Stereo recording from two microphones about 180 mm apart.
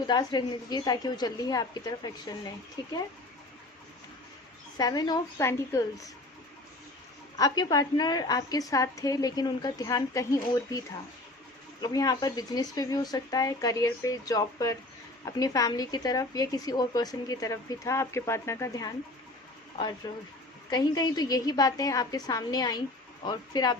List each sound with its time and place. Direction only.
0.1 s speech: 25° left (ahead or behind)
4.8 s speech: 20° left (ahead or behind)
7.3 s speech: 20° left (ahead or behind)
20.1 s speech: 20° left (ahead or behind)